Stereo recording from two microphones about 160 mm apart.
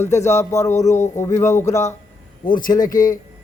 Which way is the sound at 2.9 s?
55° left (ahead or behind).